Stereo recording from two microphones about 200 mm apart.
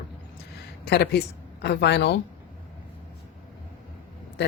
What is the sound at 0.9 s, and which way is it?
A woman's voice, 55° left (ahead or behind).